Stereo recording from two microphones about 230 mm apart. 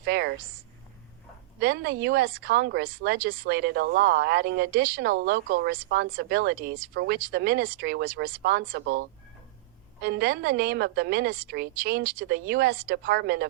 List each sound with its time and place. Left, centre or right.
0.0 s speech: right
1.5 s speech: right